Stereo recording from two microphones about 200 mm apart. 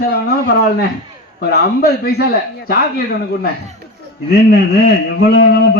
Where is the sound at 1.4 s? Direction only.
50° left (ahead or behind).